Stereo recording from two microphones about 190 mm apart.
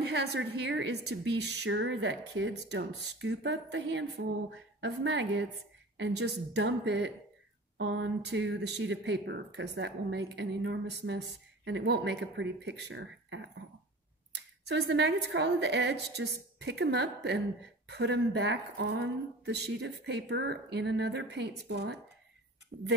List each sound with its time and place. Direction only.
0.0 s speech: 60° right (ahead or behind)